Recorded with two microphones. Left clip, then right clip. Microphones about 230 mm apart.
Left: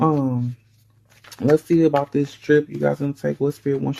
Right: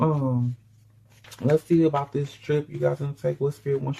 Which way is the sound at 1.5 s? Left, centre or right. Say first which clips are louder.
Left 4 dB; left.